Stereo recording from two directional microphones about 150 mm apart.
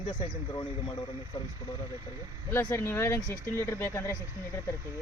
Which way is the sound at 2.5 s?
15° left (ahead or behind).